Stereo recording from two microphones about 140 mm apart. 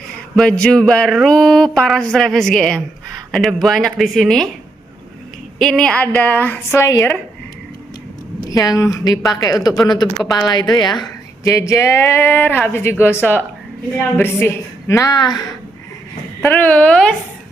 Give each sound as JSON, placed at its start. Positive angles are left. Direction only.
{"t": 0.3, "sound": "speech", "side_deg": 5}
{"t": 5.5, "sound": "speech", "side_deg": 0}
{"t": 6.3, "sound": "speech", "side_deg": 15}
{"t": 8.4, "sound": "speech", "side_deg": 25}
{"t": 16.5, "sound": "speech", "side_deg": 10}